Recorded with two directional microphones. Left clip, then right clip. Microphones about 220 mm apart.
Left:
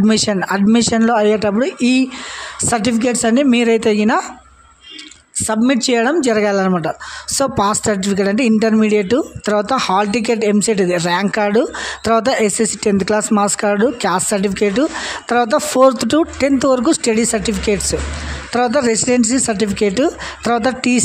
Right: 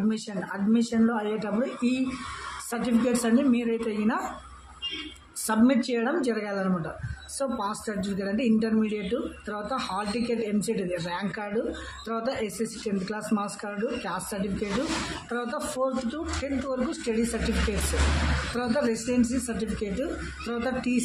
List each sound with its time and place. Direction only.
0.1 s speech: 50° left (ahead or behind)
5.5 s speech: 45° left (ahead or behind)